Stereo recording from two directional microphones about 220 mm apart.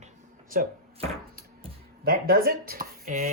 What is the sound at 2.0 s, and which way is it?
Speech, 45° right (ahead or behind).